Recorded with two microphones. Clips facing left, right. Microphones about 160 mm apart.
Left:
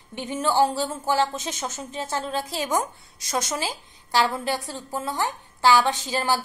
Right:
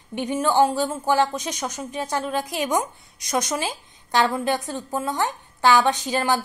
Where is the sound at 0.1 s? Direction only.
15° right (ahead or behind).